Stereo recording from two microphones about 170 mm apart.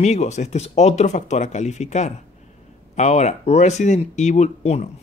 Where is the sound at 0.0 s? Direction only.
40° left (ahead or behind).